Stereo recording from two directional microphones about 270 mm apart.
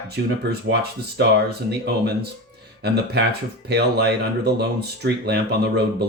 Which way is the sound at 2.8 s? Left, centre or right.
Right.